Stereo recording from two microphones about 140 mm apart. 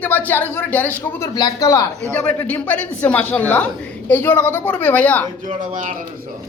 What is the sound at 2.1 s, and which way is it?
A woman's voice, 10° left (ahead or behind).